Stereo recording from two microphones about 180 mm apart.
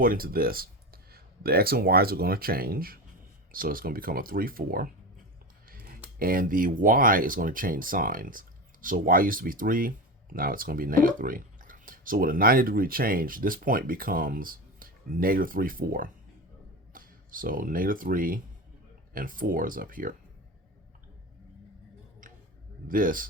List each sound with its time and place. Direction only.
0.0 s speech: 55° right (ahead or behind)
22.9 s speech: 50° right (ahead or behind)